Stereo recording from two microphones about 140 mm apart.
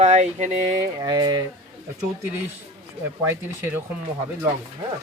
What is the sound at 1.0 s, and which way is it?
Speech, 30° right (ahead or behind).